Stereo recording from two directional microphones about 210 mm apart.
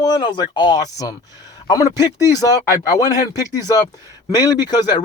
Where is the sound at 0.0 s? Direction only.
20° left (ahead or behind).